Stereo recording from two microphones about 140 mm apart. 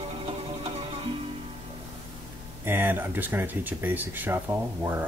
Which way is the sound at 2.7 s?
15° right (ahead or behind).